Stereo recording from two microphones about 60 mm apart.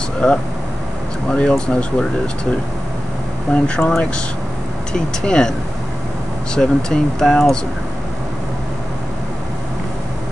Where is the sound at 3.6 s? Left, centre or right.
Centre.